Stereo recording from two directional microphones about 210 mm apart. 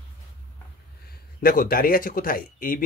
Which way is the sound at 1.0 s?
45° left (ahead or behind).